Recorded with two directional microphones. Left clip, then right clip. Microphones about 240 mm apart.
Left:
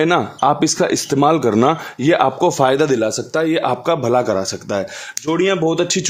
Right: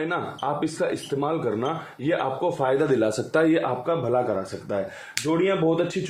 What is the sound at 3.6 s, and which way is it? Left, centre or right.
Speech, left.